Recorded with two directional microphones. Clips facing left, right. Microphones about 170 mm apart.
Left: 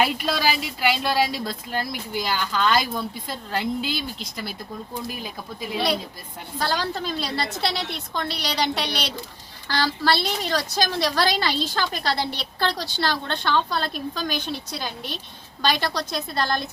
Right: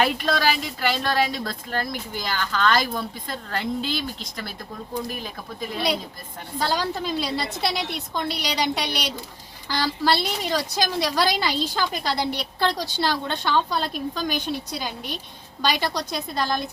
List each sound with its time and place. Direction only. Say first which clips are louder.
0.0 s a woman's voice: right 1 dB; 5° left (ahead or behind)
6.7 s speech: right 1 dB; 10° right (ahead or behind)
15.6 s speech: even; 10° right (ahead or behind)